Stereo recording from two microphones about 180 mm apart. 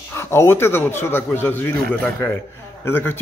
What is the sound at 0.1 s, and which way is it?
Speech, 15° left (ahead or behind).